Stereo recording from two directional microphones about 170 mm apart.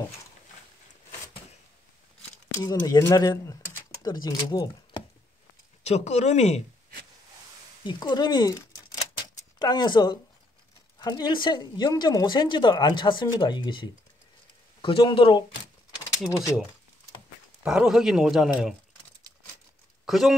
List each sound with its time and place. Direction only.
2.5 s speech: 25° left (ahead or behind)
5.9 s speech: 40° left (ahead or behind)
7.8 s a woman's voice: 25° left (ahead or behind)
17.6 s a man's voice: 5° right (ahead or behind)
20.1 s speech: centre (ahead or behind)